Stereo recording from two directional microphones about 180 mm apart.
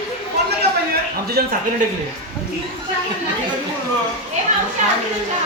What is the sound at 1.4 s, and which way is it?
Speech, 60° right (ahead or behind).